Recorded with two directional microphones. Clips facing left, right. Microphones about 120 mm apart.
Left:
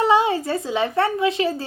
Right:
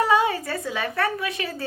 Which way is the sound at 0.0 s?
25° left (ahead or behind).